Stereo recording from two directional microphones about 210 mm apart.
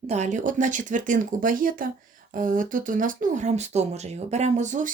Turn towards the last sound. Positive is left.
turn(degrees=-35)  # may be behind; listen again after turning